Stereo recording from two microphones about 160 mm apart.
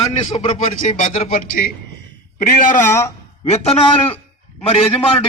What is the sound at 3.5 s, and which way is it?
Speech, 40° left (ahead or behind).